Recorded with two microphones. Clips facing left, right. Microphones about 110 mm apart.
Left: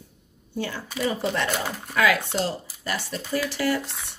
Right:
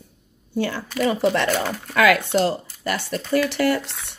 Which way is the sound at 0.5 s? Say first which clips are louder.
Right 6 dB; 75° right (ahead or behind).